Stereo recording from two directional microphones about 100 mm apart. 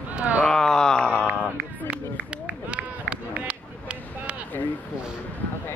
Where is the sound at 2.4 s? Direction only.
15° right (ahead or behind).